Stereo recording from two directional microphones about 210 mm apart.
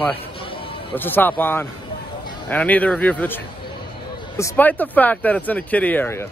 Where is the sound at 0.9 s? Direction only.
10° left (ahead or behind).